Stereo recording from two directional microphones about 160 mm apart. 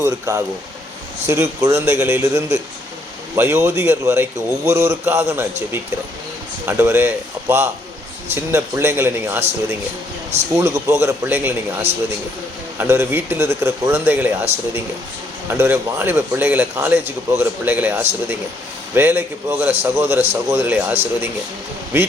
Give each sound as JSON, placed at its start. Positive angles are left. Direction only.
{"t": 0.0, "sound": "speech", "side_deg": -15}
{"t": 10.6, "sound": "speech", "side_deg": -20}
{"t": 12.7, "sound": "speech", "side_deg": -15}